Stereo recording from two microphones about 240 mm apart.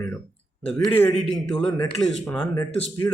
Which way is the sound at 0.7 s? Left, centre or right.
Centre.